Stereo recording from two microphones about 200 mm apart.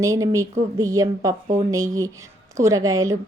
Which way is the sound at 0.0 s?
15° right (ahead or behind).